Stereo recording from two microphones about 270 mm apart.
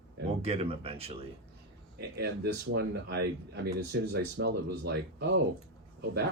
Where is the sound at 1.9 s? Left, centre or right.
Right.